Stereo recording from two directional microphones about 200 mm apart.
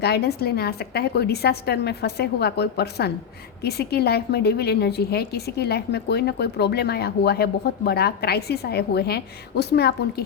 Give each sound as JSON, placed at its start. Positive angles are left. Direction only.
{"t": 0.0, "sound": "a woman's voice", "side_deg": 55}